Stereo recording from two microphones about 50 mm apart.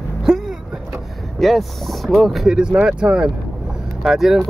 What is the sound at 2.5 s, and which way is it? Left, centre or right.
Speech, centre.